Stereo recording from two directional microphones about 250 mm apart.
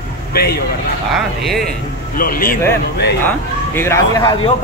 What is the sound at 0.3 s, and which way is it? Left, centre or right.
Speech, left.